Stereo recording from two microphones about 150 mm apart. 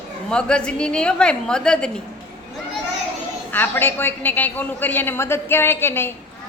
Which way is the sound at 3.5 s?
15° left (ahead or behind).